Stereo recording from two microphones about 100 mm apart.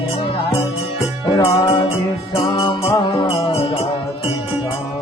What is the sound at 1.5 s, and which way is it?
Music, 60° left (ahead or behind).